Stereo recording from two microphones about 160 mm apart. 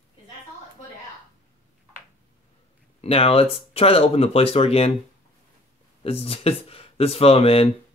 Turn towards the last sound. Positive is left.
turn(degrees=35)  # may be behind; listen again after turning